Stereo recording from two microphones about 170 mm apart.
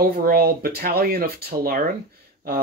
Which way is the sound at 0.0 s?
60° right (ahead or behind).